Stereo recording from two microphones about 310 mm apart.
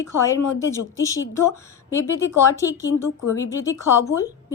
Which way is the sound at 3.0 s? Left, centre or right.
Left.